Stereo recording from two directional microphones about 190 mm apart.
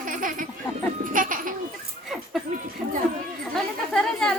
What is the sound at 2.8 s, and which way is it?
Speech, 5° right (ahead or behind).